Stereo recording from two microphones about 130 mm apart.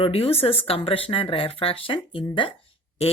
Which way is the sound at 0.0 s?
50° left (ahead or behind).